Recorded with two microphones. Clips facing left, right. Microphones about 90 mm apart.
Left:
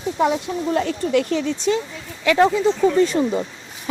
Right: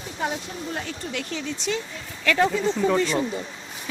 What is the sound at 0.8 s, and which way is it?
Speech, 45° left (ahead or behind).